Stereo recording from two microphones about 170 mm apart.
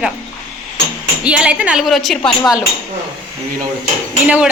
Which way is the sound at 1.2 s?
5° right (ahead or behind).